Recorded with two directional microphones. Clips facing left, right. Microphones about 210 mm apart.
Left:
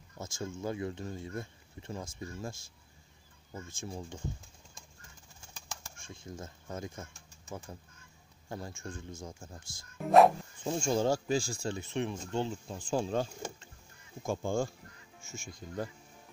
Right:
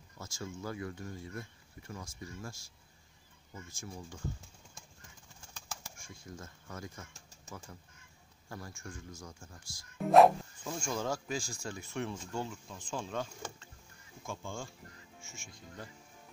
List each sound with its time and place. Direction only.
0.2 s speech: 20° left (ahead or behind)
5.9 s speech: 25° left (ahead or behind)
9.9 s speech: centre (ahead or behind)
10.6 s speech: 25° left (ahead or behind)